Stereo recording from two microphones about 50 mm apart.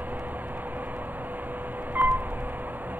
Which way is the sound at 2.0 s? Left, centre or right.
Right.